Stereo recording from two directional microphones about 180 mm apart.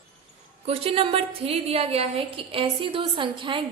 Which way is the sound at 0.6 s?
30° right (ahead or behind).